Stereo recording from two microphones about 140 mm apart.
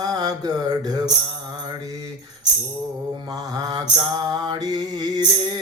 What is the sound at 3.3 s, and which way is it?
Mantra, 30° right (ahead or behind).